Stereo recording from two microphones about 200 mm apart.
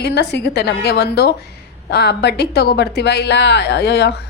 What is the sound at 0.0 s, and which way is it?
A woman's voice, 55° left (ahead or behind).